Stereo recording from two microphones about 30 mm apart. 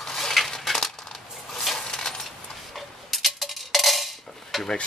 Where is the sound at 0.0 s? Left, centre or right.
Centre.